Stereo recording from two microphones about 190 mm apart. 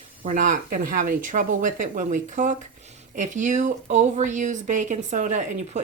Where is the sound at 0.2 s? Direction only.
45° right (ahead or behind).